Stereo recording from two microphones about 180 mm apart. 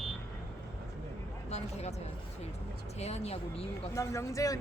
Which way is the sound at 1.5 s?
35° left (ahead or behind).